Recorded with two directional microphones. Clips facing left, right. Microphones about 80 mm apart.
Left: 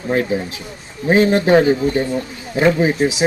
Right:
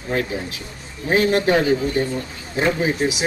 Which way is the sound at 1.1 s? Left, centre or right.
Left.